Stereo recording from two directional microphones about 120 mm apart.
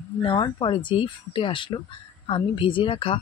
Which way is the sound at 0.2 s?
45° left (ahead or behind).